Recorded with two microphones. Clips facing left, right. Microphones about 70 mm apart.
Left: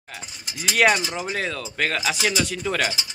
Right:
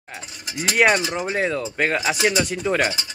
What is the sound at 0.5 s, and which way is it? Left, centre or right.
Cowbell, right.